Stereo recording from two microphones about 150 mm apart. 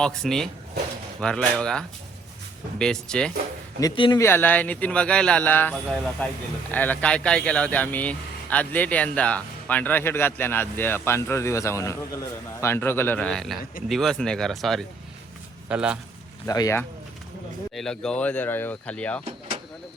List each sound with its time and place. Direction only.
0.0 s speech: 5° left (ahead or behind)
3.9 s speech: 35° left (ahead or behind)
4.2 s a man's voice: 15° left (ahead or behind)
5.9 s a man's voice: centre (ahead or behind)
16.5 s speech: 25° left (ahead or behind)
17.7 s a man's voice: 5° left (ahead or behind)